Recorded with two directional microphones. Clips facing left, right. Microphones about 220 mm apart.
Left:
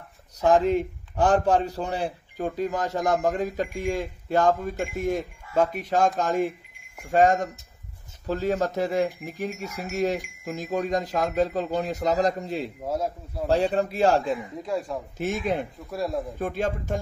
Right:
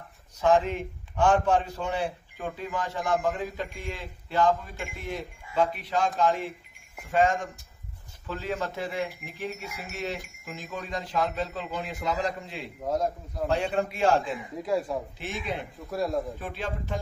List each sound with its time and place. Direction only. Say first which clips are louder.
0.4 s a man's voice: left 3 dB; 40° left (ahead or behind)
14.6 s speech: right 1 dB; centre (ahead or behind)
15.1 s a man's voice: left 7 dB; 45° left (ahead or behind)
15.9 s speech: right 1 dB; centre (ahead or behind)
16.3 s a man's voice: left 7 dB; 45° left (ahead or behind)